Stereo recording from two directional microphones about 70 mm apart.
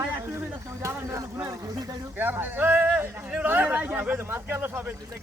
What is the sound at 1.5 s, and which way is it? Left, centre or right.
Speech, right.